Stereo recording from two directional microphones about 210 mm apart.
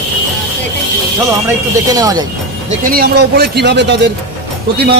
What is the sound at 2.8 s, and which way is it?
Speech, 45° right (ahead or behind).